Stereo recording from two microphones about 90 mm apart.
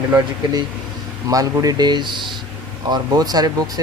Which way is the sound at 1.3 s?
40° right (ahead or behind).